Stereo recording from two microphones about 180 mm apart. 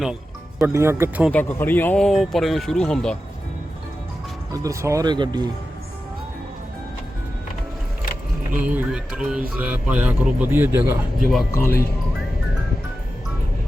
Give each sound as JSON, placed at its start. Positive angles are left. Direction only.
{"t": 0.6, "sound": "speech", "side_deg": -15}
{"t": 1.3, "sound": "speech", "side_deg": 10}
{"t": 4.5, "sound": "speech", "side_deg": -15}
{"t": 8.7, "sound": "speech", "side_deg": -5}
{"t": 11.2, "sound": "speech", "side_deg": 0}
{"t": 11.5, "sound": "speech", "side_deg": 15}